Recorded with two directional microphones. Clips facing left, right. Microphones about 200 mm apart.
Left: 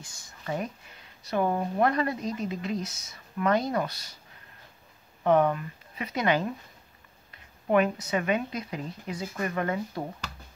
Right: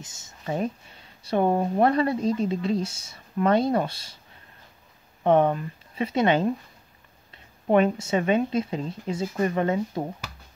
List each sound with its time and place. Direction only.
0.0 s speech: 25° right (ahead or behind)
5.2 s speech: 25° right (ahead or behind)